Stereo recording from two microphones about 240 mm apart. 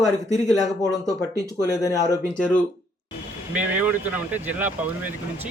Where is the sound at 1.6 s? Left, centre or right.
Centre.